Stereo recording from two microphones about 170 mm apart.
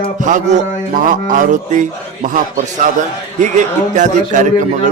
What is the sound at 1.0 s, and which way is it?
Speech, 50° right (ahead or behind).